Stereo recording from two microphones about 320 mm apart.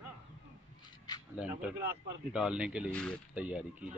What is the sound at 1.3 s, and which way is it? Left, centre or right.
Speech, centre.